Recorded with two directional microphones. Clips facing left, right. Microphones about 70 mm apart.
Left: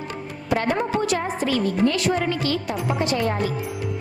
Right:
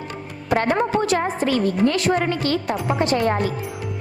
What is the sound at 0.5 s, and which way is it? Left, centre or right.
A woman's voice, right.